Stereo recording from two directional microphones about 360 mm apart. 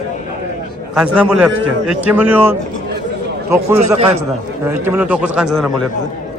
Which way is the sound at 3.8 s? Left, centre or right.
Centre.